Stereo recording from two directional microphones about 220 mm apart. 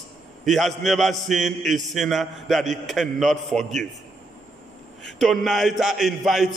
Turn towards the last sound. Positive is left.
turn(degrees=0)  # may be behind; listen again after turning